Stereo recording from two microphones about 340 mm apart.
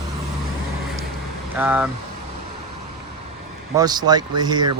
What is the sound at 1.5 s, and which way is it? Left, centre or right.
Speech, centre.